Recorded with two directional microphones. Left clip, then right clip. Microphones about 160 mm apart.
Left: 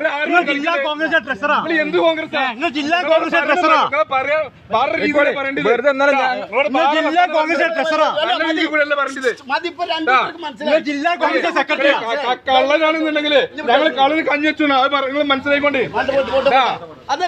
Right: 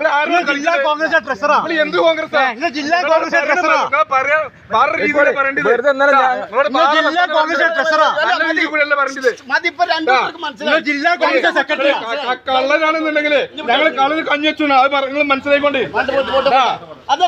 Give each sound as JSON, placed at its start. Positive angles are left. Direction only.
{"t": 0.8, "sound": "a man's voice", "side_deg": 20}
{"t": 1.8, "sound": "a man's voice", "side_deg": -15}
{"t": 2.4, "sound": "a man's voice", "side_deg": 45}
{"t": 9.8, "sound": "a man's voice", "side_deg": 20}
{"t": 11.4, "sound": "a man's voice", "side_deg": 15}